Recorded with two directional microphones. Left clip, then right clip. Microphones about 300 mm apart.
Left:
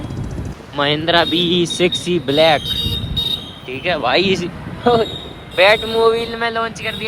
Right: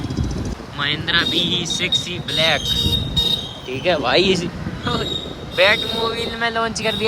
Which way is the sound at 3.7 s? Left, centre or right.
Centre.